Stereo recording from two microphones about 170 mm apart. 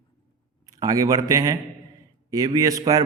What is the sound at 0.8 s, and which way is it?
A man's voice, 20° right (ahead or behind).